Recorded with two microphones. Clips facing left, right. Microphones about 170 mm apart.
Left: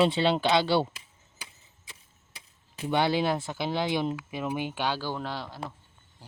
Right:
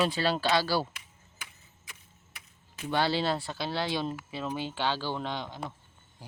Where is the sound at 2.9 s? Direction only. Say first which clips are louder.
Left 3 dB; 15° left (ahead or behind).